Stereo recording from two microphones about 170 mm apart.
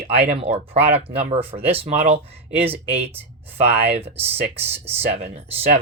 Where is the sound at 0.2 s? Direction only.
40° right (ahead or behind).